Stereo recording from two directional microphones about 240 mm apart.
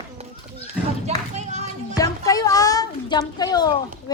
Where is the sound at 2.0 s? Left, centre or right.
Centre.